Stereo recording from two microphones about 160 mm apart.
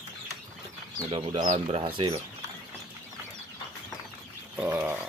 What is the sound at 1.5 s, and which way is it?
Speech, 35° right (ahead or behind).